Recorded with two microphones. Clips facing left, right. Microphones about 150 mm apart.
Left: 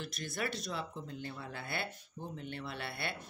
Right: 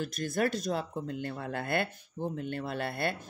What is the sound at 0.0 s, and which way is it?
Speech, 45° right (ahead or behind).